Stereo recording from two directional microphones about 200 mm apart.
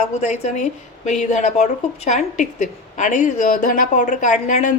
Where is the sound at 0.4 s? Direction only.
35° left (ahead or behind).